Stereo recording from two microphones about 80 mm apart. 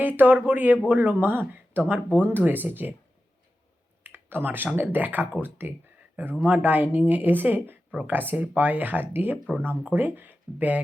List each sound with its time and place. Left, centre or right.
0.0 s speech: right
4.0 s speech: right